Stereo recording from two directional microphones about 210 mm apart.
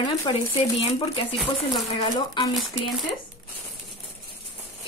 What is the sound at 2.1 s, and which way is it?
Speech, 15° left (ahead or behind).